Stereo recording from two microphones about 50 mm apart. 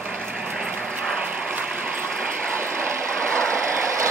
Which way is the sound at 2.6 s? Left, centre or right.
Right.